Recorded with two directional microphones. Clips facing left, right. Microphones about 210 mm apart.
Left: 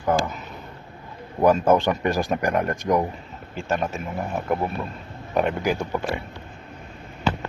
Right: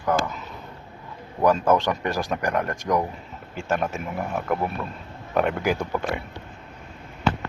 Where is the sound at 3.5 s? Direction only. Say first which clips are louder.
Even; 10° right (ahead or behind).